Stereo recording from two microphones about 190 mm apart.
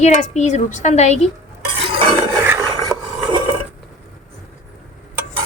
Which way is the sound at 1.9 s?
25° right (ahead or behind).